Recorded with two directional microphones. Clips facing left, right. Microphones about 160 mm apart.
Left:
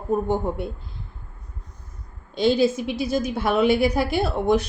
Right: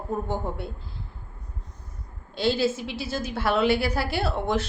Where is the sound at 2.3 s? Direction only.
15° left (ahead or behind).